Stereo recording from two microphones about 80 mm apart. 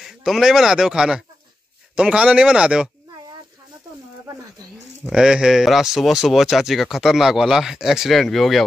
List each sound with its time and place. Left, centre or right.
0.0 s speech: centre
5.0 s speech: centre